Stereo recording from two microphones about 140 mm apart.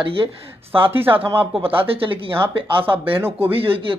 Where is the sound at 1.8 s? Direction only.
40° right (ahead or behind).